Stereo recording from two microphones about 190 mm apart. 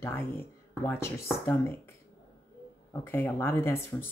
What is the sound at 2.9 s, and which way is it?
Speech, 10° left (ahead or behind).